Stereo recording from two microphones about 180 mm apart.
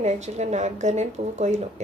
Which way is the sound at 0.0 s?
40° right (ahead or behind).